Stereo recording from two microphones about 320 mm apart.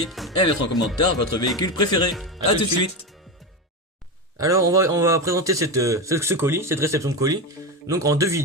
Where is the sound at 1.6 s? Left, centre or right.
Centre.